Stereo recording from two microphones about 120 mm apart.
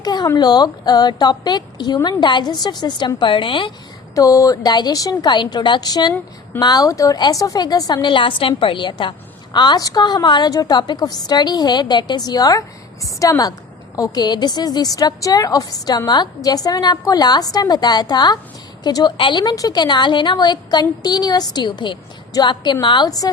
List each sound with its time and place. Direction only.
0.0 s a woman's voice: 35° left (ahead or behind)
4.1 s a woman's voice: 25° left (ahead or behind)